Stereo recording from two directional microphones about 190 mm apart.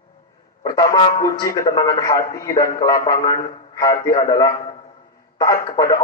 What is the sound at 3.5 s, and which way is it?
Speech, 20° left (ahead or behind).